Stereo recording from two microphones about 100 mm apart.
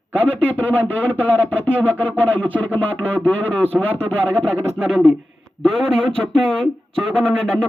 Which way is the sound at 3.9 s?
75° right (ahead or behind).